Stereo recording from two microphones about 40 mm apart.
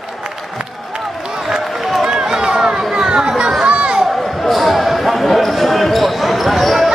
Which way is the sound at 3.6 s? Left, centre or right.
Right.